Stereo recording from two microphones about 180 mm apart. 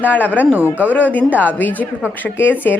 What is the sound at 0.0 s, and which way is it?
A woman's voice, 10° left (ahead or behind).